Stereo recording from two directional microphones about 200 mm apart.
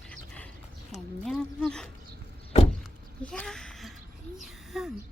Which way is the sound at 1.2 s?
5° left (ahead or behind).